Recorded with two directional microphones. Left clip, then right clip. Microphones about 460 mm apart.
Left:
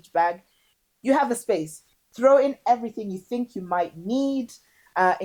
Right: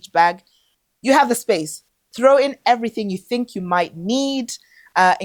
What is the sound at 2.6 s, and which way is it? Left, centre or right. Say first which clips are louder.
Speech: right 5 dB; right.